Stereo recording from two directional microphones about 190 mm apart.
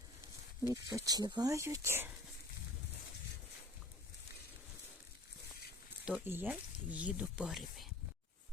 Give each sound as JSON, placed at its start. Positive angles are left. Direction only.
{"t": 0.7, "sound": "speech", "side_deg": -20}
{"t": 6.1, "sound": "speech", "side_deg": -10}